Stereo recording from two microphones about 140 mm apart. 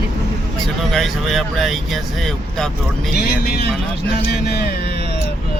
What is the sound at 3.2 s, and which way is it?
Speech, 90° left.